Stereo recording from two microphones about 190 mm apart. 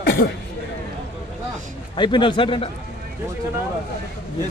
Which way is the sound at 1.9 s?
25° left (ahead or behind).